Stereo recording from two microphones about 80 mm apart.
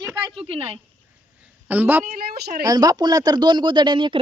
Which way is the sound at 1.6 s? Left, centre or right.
Right.